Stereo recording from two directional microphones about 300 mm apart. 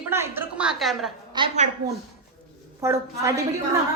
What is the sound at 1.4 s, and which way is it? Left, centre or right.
Speech, right.